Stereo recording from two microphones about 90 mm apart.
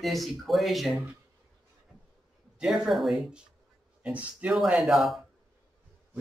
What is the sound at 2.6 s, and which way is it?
Speech, 5° right (ahead or behind).